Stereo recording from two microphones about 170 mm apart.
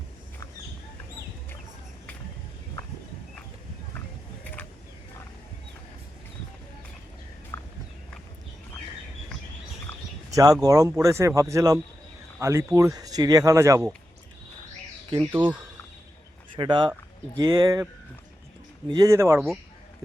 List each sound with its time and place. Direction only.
7.5 s walk: 15° left (ahead or behind)
10.3 s speech: 20° right (ahead or behind)
15.2 s speech: 10° right (ahead or behind)
16.6 s speech: 25° right (ahead or behind)
18.9 s speech: 20° right (ahead or behind)